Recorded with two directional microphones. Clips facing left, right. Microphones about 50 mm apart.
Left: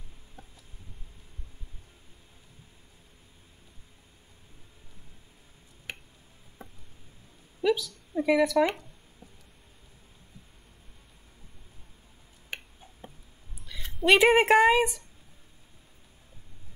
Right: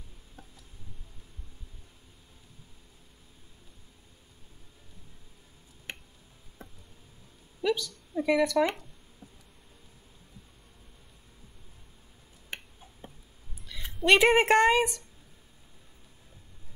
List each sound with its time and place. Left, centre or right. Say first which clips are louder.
6.6 s tick-tock: left 1 dB; centre
7.6 s speech: left 3 dB; centre
13.7 s a sound: even; centre
14.0 s a woman's voice: left 1 dB; centre